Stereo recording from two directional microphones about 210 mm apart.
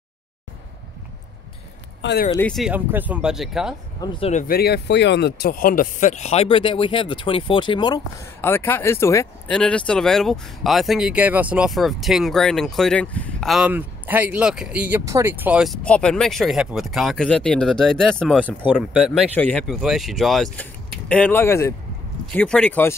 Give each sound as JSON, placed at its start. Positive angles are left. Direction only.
{"t": 2.0, "sound": "a sound", "side_deg": 55}
{"t": 2.3, "sound": "speech", "side_deg": 5}
{"t": 4.0, "sound": "speech", "side_deg": 20}
{"t": 4.3, "sound": "speech", "side_deg": 40}
{"t": 8.4, "sound": "speech", "side_deg": 10}